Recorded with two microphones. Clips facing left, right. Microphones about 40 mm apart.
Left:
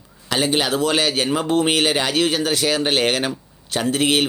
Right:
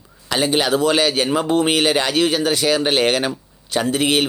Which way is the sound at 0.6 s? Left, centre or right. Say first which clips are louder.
Right 3 dB; right.